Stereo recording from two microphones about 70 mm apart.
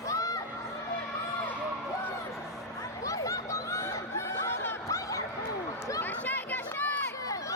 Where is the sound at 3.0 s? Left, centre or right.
Left.